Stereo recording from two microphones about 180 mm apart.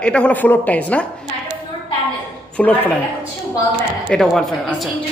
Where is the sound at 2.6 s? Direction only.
5° left (ahead or behind).